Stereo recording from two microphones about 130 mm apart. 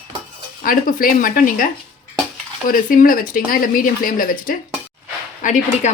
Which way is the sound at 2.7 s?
90° left.